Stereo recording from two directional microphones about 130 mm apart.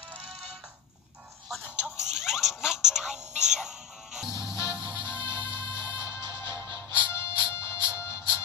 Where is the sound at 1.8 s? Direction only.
5° right (ahead or behind).